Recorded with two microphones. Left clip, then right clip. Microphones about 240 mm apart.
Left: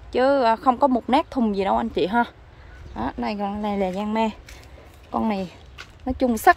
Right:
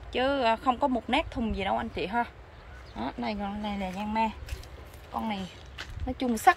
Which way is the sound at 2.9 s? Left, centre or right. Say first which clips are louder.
Left 6 dB; centre.